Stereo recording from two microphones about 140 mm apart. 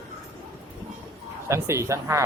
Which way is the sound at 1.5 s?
20° right (ahead or behind).